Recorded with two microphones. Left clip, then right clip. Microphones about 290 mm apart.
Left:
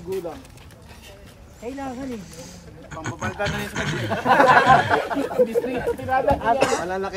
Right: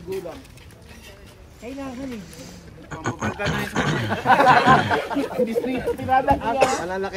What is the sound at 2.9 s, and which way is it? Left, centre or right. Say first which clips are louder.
A man's voice: right 2 dB; centre.